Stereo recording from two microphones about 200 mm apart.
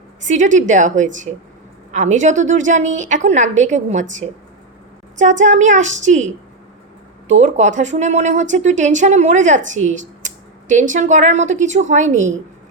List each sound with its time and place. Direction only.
0.3 s speech: 40° right (ahead or behind)
5.4 s speech: 35° right (ahead or behind)